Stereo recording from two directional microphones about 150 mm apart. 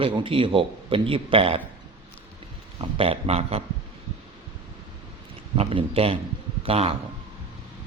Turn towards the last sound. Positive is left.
turn(degrees=-40)  # may be behind; listen again after turning